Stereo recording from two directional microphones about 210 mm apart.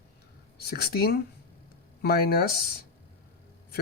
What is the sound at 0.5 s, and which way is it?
Speech, 50° left (ahead or behind).